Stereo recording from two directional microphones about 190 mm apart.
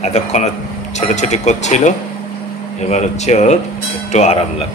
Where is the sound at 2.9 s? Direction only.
40° left (ahead or behind).